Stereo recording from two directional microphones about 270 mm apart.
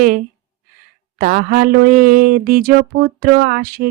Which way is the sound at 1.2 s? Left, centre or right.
Right.